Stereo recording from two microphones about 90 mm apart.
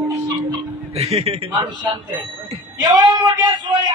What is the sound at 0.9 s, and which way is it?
Speech, 90° right.